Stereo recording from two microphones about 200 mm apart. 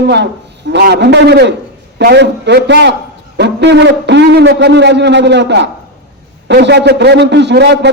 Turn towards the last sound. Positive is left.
turn(degrees=-55)  # may be behind; listen again after turning